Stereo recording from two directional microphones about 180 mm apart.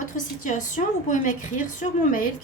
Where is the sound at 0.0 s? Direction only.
45° left (ahead or behind).